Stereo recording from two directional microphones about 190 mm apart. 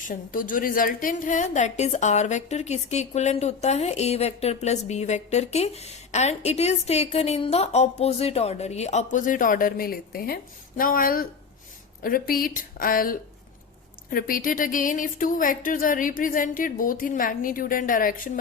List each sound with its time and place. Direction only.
0.0 s a woman's voice: 45° left (ahead or behind)